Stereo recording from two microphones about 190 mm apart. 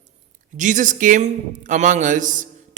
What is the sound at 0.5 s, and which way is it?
A man's voice, 40° right (ahead or behind).